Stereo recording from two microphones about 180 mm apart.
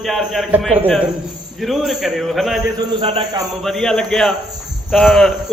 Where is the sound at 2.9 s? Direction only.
30° right (ahead or behind).